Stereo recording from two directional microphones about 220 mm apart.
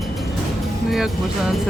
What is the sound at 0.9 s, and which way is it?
Speech, centre (ahead or behind).